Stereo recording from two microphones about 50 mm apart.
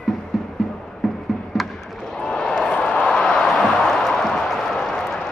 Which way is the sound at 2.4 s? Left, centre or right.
Centre.